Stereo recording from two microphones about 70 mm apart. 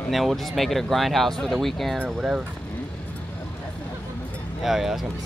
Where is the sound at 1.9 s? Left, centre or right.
Centre.